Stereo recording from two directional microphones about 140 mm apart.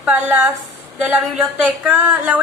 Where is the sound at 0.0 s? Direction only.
10° right (ahead or behind).